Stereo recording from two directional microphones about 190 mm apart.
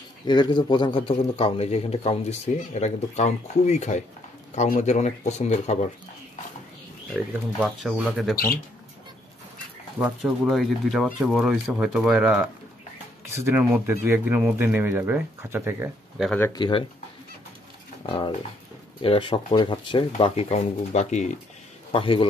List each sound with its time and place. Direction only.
0.3 s a man's voice: 25° left (ahead or behind)
7.6 s speech: centre (ahead or behind)
9.9 s speech: 5° right (ahead or behind)
16.2 s speech: 10° left (ahead or behind)
16.5 s speech: 25° left (ahead or behind)
18.0 s a man's voice: 25° left (ahead or behind)
21.9 s speech: 25° left (ahead or behind)